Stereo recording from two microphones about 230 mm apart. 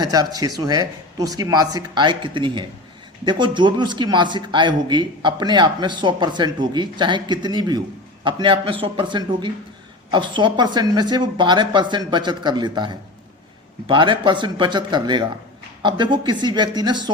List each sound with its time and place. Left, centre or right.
0.0 s a man's voice: centre